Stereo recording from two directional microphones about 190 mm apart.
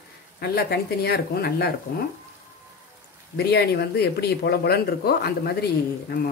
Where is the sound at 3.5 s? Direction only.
60° left (ahead or behind).